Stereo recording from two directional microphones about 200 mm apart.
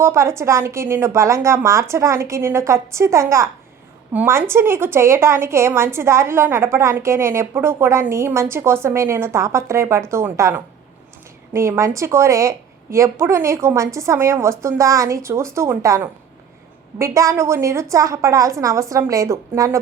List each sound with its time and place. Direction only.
0.0 s a woman's voice: 15° right (ahead or behind)